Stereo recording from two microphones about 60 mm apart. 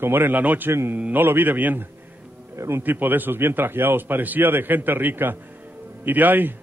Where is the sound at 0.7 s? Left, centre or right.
Right.